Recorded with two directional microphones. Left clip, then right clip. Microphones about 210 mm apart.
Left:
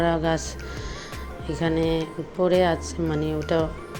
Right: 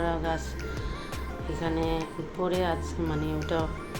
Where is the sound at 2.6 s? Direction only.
30° left (ahead or behind).